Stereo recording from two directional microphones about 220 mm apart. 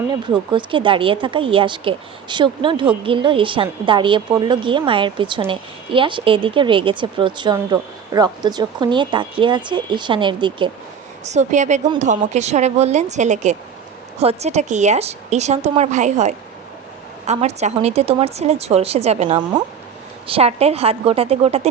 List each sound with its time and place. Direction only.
0.1 s speech: 20° right (ahead or behind)
11.3 s a woman's voice: 30° right (ahead or behind)